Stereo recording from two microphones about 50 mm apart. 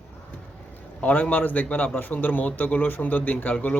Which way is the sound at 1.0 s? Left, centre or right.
Left.